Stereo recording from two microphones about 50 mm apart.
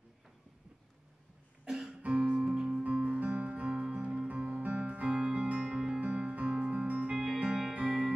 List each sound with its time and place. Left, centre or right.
1.7 s music: centre
2.0 s music: right
2.8 s music: right
7.3 s music: centre